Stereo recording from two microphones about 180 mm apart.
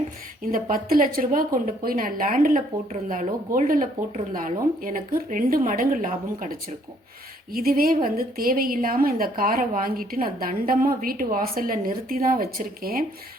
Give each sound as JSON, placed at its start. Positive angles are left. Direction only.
{"t": 0.5, "sound": "a woman's voice", "side_deg": -50}